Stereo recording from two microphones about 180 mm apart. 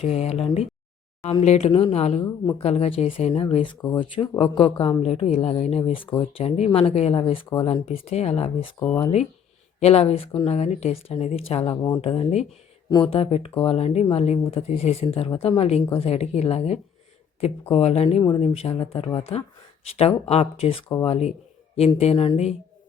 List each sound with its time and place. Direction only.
0.0 s speech: 35° left (ahead or behind)
2.2 s a woman's voice: 20° left (ahead or behind)
2.6 s a woman's voice: 35° left (ahead or behind)
11.7 s a woman's voice: 20° left (ahead or behind)
12.0 s speech: 35° left (ahead or behind)